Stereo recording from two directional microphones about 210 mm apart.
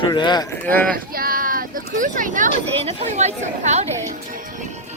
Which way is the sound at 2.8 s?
30° right (ahead or behind).